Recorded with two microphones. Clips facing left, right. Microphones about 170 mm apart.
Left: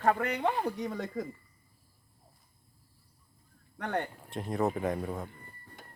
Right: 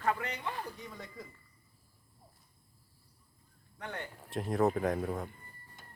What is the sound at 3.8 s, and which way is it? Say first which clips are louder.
Speech: left 9 dB; 65° left (ahead or behind).